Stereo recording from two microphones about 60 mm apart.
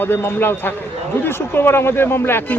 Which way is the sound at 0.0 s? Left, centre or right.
Left.